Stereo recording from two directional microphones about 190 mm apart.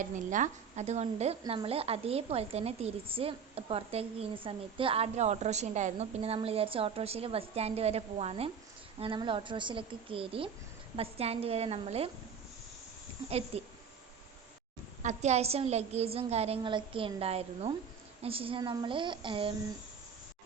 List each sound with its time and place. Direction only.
0.0 s a woman's voice: 40° right (ahead or behind)
13.5 s speech: 35° right (ahead or behind)
15.0 s a woman's voice: 35° right (ahead or behind)